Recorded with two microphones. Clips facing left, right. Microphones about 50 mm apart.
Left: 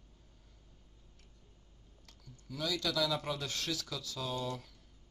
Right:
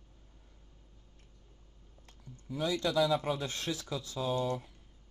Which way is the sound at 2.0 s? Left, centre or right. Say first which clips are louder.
Right 5 dB; right.